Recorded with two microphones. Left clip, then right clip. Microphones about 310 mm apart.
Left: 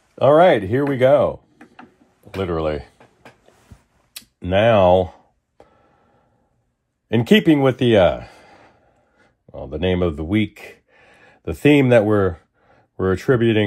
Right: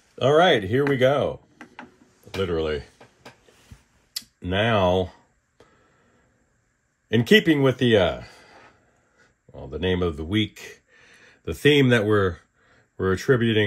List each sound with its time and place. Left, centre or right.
0.2 s speech: centre
2.4 s speech: centre
4.4 s speech: centre
7.1 s speech: centre